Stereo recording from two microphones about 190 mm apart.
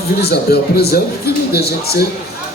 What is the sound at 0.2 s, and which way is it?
Speech, 55° left (ahead or behind).